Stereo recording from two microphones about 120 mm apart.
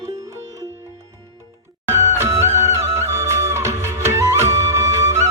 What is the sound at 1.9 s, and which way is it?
Music, 20° right (ahead or behind).